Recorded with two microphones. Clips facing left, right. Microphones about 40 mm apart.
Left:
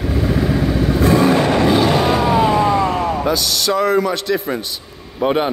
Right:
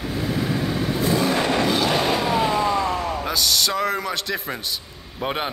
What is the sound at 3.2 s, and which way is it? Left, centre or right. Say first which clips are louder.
A man's voice: left 4 dB; centre.